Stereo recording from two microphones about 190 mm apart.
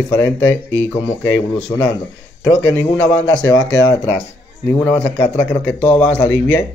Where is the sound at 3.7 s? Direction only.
80° left.